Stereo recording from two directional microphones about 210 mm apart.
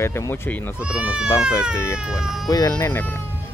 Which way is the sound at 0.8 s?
5° right (ahead or behind).